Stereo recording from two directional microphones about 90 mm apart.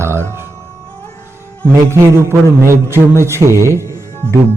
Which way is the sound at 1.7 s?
30° right (ahead or behind).